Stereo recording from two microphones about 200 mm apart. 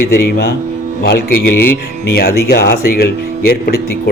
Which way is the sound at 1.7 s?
50° left (ahead or behind).